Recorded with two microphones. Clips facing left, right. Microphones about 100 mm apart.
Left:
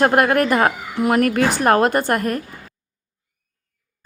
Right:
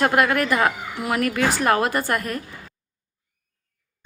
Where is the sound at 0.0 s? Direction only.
40° left (ahead or behind).